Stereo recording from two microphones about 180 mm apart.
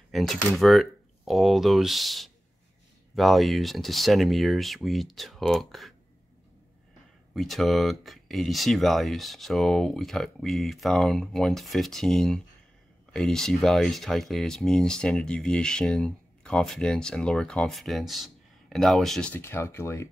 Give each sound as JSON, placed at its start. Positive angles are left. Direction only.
{"t": 0.1, "sound": "speech", "side_deg": 0}
{"t": 7.3, "sound": "speech", "side_deg": 0}
{"t": 19.4, "sound": "speech", "side_deg": 15}